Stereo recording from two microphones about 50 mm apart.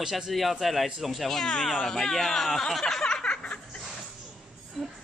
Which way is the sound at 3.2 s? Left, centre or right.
Left.